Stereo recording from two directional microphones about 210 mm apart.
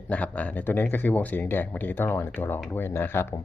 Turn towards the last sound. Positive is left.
turn(degrees=10)  # may be behind; listen again after turning